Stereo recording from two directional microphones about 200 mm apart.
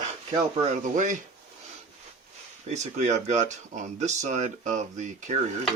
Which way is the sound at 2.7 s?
35° right (ahead or behind).